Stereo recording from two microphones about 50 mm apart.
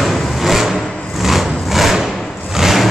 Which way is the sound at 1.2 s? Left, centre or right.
Centre.